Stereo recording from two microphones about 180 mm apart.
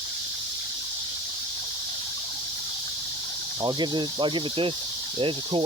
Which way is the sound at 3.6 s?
25° right (ahead or behind).